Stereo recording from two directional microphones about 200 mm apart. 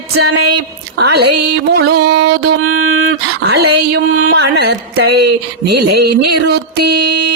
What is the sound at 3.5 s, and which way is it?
Speech, 55° right (ahead or behind).